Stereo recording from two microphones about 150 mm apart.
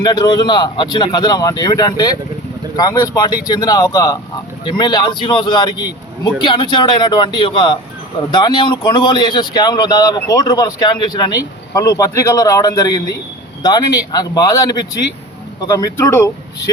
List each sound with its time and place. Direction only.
0.0 s a man's voice: 30° left (ahead or behind)